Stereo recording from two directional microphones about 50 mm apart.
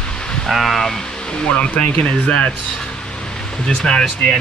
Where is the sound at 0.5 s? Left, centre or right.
Centre.